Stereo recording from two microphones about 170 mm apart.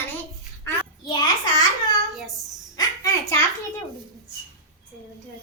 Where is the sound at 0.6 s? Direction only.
25° left (ahead or behind).